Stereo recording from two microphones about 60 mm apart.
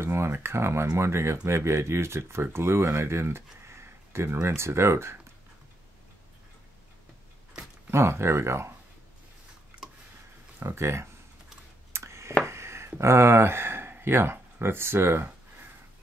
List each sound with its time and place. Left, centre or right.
0.0 s speech: right
7.9 s speech: right
9.7 s a sound: right
10.6 s speech: right
11.9 s a sound: right
12.4 s speech: right